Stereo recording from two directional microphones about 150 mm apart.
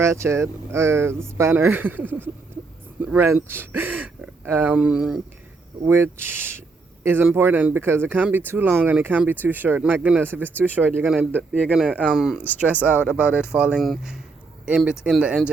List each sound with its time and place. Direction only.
0.0 s speech: 20° right (ahead or behind)
5.8 s a man's voice: 15° right (ahead or behind)